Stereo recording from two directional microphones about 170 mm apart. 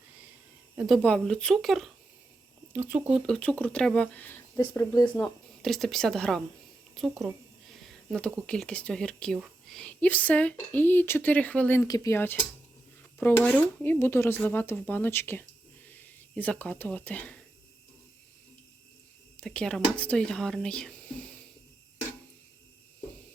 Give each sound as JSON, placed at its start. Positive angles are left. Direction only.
{"t": 0.8, "sound": "speech", "side_deg": 0}
{"t": 2.7, "sound": "speech", "side_deg": -10}
{"t": 19.4, "sound": "speech", "side_deg": 5}